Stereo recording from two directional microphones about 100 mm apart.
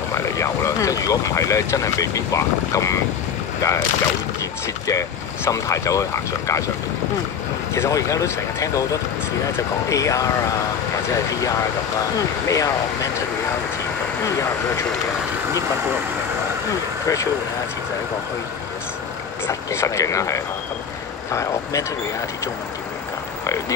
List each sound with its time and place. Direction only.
0.1 s speech: 30° left (ahead or behind)
4.8 s speech: 35° left (ahead or behind)
7.7 s speech: 30° left (ahead or behind)
9.8 s speech: 30° left (ahead or behind)
12.4 s speech: 35° left (ahead or behind)
19.4 s speech: 30° left (ahead or behind)